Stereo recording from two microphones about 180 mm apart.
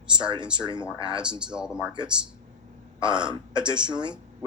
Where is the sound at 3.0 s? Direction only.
25° right (ahead or behind).